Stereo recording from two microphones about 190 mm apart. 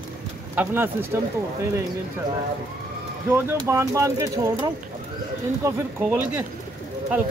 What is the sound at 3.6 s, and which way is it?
Speech, 15° right (ahead or behind).